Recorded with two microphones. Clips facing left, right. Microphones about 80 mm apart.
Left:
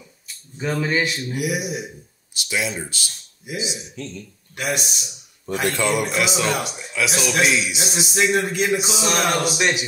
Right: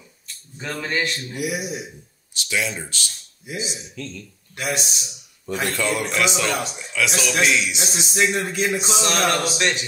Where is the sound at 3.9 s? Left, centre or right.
Left.